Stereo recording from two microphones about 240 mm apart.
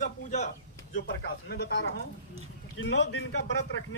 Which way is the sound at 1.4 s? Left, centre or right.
Left.